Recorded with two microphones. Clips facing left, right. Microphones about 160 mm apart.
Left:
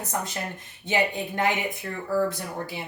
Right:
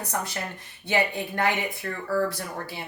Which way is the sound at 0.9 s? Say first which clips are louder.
Even; 20° left (ahead or behind).